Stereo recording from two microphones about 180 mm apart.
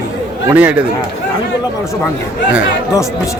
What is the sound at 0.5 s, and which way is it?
Speech, 10° right (ahead or behind).